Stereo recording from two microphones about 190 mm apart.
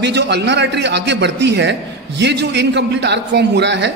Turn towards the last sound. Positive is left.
turn(degrees=-65)  # may be behind; listen again after turning